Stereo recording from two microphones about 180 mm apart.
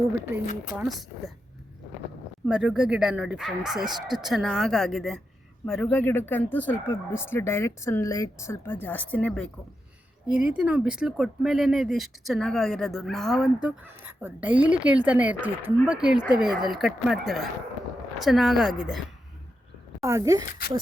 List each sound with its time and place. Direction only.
0.8 s speech: centre (ahead or behind)
2.5 s speech: 5° right (ahead or behind)
10.2 s speech: 5° right (ahead or behind)
20.1 s speech: 15° right (ahead or behind)